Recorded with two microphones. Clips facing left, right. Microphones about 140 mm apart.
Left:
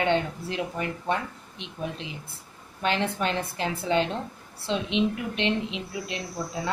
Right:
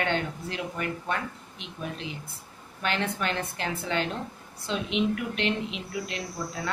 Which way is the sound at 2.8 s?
30° left (ahead or behind).